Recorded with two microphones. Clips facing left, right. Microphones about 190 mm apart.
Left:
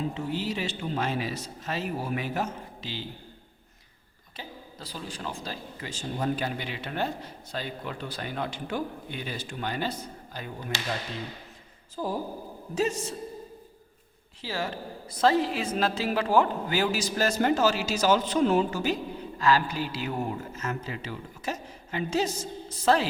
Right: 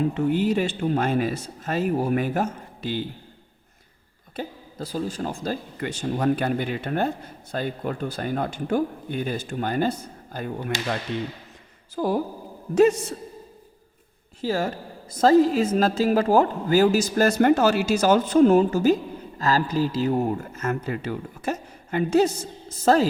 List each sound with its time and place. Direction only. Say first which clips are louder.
0.0 s speech: right 9 dB; 60° right (ahead or behind)
4.4 s speech: right 10 dB; 50° right (ahead or behind)
11.9 s speech: right 7 dB; 75° right (ahead or behind)
12.7 s a man's voice: right 10 dB; 60° right (ahead or behind)
14.4 s a man's voice: right 7 dB; 45° right (ahead or behind)
20.6 s speech: right 7 dB; 55° right (ahead or behind)